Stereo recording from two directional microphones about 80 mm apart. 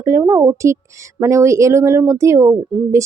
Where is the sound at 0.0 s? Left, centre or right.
Right.